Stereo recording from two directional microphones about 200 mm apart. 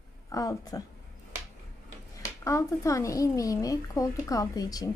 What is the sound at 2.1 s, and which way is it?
Speech, 15° left (ahead or behind).